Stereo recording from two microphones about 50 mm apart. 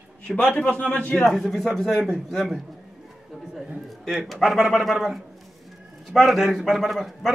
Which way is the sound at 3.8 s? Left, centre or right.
Centre.